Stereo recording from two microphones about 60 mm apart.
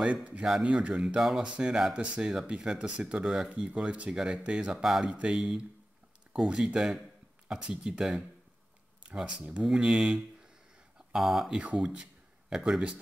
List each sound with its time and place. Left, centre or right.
0.0 s speech: right
11.1 s speech: centre
11.8 s speech: centre